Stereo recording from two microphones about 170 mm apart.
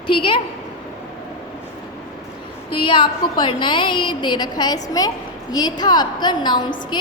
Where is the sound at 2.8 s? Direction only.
30° left (ahead or behind).